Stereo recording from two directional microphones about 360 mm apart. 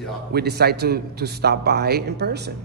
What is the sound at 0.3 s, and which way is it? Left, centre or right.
Speech, right.